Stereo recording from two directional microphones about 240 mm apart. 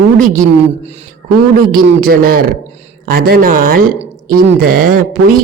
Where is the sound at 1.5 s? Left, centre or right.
Right.